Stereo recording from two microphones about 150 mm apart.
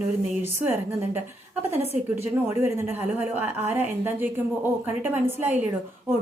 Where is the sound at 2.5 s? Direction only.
20° right (ahead or behind).